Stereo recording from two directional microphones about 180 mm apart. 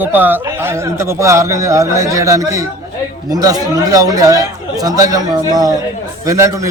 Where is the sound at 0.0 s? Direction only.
10° right (ahead or behind).